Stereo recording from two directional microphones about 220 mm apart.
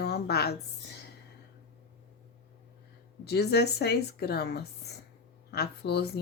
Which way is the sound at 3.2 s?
45° left (ahead or behind).